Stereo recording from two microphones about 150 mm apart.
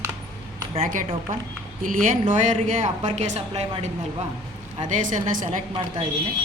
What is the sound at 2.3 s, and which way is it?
A woman's voice, 60° right (ahead or behind).